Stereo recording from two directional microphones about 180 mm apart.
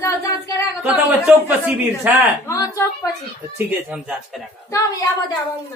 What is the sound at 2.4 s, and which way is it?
Speech, 15° left (ahead or behind).